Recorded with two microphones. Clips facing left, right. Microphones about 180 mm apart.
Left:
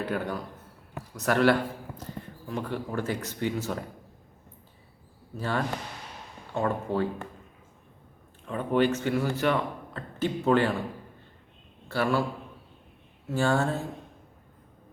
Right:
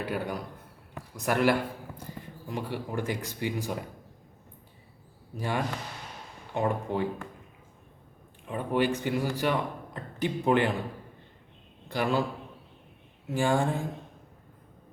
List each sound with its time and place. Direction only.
0.0 s a man's voice: 10° right (ahead or behind)
5.4 s a man's voice: 15° right (ahead or behind)
8.4 s a man's voice: 10° right (ahead or behind)
11.9 s a man's voice: 15° right (ahead or behind)
13.3 s a man's voice: 15° right (ahead or behind)